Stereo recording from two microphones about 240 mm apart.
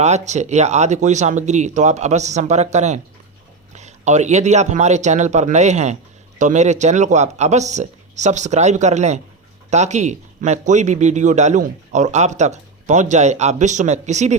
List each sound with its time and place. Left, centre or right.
0.0 s speech: right